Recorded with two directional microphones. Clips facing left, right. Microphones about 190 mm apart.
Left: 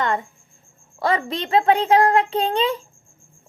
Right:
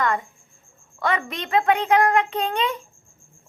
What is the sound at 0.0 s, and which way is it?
Cricket, 25° left (ahead or behind).